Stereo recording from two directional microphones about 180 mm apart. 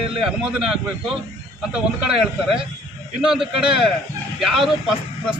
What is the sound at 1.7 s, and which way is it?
A man's voice, 5° right (ahead or behind).